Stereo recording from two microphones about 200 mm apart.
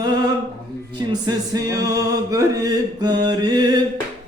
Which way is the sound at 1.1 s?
20° right (ahead or behind).